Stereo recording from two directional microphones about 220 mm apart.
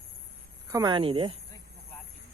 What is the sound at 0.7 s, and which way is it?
Speech, 20° right (ahead or behind).